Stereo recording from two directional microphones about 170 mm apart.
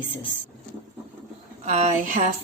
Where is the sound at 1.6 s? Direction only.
45° right (ahead or behind).